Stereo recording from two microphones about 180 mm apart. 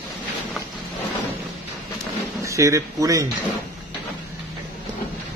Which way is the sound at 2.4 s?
15° right (ahead or behind).